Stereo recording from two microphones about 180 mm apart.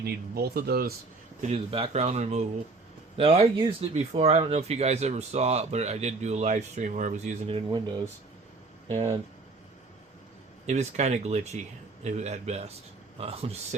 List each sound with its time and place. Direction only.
0.0 s speech: 60° right (ahead or behind)
1.4 s speech: 35° right (ahead or behind)
10.7 s speech: 40° right (ahead or behind)